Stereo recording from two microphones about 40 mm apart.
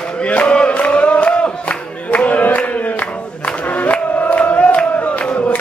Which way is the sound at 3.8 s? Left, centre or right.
Left.